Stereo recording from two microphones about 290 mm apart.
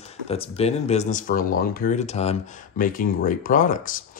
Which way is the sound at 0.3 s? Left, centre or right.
Left.